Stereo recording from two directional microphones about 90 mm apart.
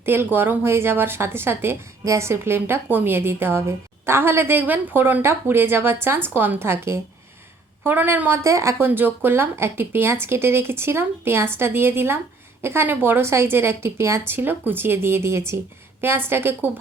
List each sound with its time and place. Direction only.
0.0 s speech: 25° right (ahead or behind)
8.4 s a woman's voice: 35° right (ahead or behind)
8.9 s speech: 20° right (ahead or behind)